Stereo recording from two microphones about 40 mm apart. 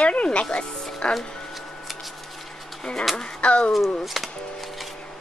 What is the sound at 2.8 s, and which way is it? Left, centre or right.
Speech, centre.